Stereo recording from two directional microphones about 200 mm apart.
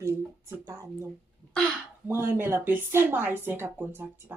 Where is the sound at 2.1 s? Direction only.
10° right (ahead or behind).